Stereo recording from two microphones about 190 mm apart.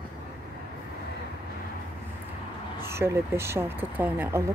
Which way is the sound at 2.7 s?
15° right (ahead or behind).